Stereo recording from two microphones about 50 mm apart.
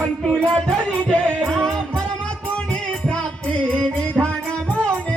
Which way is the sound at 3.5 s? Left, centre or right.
Centre.